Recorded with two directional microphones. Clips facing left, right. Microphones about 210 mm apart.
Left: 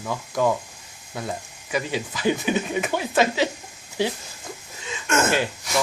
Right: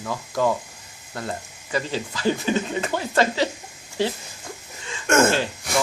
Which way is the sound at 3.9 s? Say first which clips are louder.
Even; 10° left (ahead or behind).